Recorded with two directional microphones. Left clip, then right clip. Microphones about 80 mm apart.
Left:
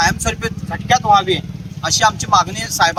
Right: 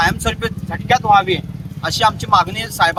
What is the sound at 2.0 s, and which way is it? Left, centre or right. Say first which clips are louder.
Speech: right 1 dB; centre.